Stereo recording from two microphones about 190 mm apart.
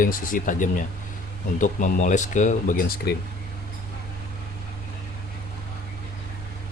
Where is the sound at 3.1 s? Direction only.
60° left (ahead or behind).